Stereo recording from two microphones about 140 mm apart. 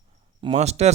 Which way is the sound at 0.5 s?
50° right (ahead or behind).